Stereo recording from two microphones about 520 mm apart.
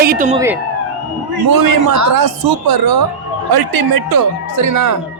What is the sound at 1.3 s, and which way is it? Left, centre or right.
A man's voice, right.